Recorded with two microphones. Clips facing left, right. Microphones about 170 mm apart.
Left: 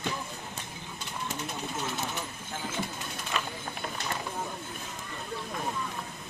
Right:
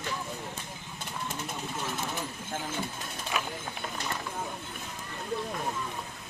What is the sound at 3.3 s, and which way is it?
Mechanisms, 10° right (ahead or behind).